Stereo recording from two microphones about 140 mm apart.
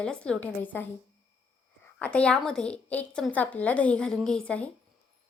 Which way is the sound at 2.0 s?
10° left (ahead or behind).